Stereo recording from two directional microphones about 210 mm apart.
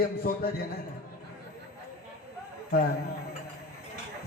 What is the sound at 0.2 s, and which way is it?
Music, 45° left (ahead or behind).